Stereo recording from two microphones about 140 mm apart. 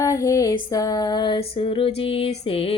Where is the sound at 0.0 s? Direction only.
20° left (ahead or behind).